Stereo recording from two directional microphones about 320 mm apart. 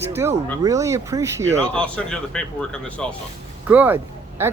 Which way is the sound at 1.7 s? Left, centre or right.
Centre.